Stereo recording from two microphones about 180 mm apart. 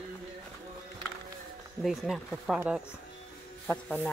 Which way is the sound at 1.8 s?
Centre (ahead or behind).